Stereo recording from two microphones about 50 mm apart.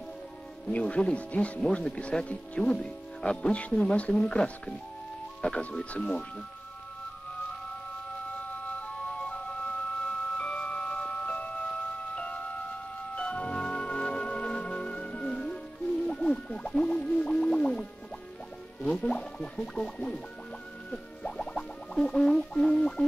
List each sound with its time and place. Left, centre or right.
0.7 s speech: left
8.3 s music: left
22.6 s a sound: centre